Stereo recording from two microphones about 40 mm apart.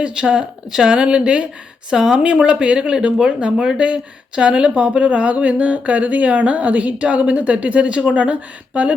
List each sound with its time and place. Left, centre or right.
0.0 s speech: right
1.9 s speech: centre
2.2 s speech: right
2.9 s speech: centre; by 8.9 s right